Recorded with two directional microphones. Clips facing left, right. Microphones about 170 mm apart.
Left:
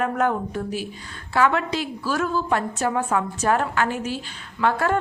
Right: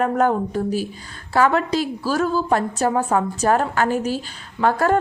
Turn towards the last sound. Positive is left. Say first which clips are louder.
# right 3 dB
turn(degrees=-40)  # may be behind; listen again after turning